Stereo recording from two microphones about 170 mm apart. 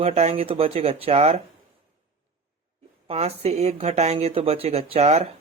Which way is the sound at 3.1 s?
35° right (ahead or behind).